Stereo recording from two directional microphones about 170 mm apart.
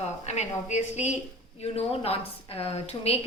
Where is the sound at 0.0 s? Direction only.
40° left (ahead or behind).